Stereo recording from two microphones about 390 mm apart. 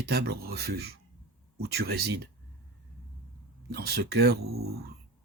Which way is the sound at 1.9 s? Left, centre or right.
Right.